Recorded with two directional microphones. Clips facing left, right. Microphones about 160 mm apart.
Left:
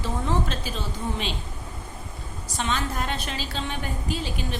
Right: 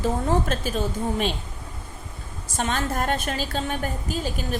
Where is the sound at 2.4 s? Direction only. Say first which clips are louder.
Right 2 dB; 50° right (ahead or behind).